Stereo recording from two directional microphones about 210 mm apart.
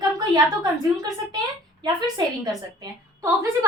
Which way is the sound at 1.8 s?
20° right (ahead or behind).